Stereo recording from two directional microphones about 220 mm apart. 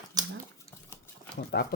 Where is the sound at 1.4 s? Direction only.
45° left (ahead or behind).